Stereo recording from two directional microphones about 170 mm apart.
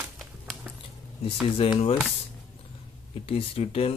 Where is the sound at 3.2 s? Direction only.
35° left (ahead or behind).